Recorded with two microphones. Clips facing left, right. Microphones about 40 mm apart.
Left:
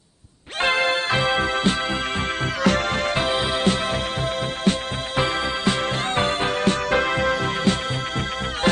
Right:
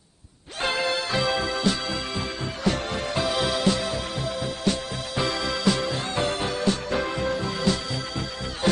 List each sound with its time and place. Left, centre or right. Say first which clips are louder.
0.6 s music: left 5 dB; left
2.6 s music: left 5 dB; left